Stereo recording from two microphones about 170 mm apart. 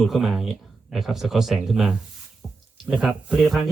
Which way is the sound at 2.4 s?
Centre (ahead or behind).